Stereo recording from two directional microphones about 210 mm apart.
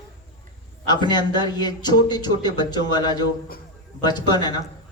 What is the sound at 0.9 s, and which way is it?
A man's voice, 20° left (ahead or behind).